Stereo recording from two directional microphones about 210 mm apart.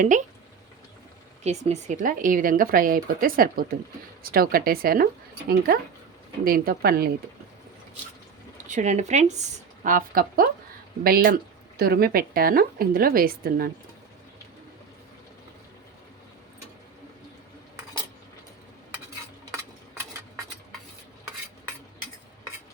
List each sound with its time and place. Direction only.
1.5 s a woman's voice: 30° right (ahead or behind)
8.6 s a woman's voice: 35° right (ahead or behind)